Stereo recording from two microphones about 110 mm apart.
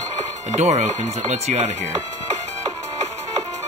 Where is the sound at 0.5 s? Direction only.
85° right.